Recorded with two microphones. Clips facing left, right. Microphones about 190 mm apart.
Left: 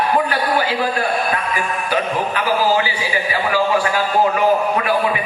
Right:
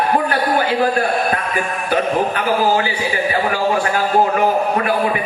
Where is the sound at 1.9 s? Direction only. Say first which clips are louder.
Right 4 dB; 50° right (ahead or behind).